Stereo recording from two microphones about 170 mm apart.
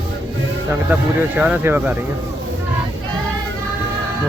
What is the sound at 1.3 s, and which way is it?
Speech, 10° right (ahead or behind).